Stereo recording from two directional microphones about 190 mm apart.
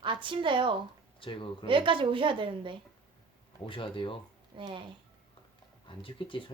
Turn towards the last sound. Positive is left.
turn(degrees=25)  # may be behind; listen again after turning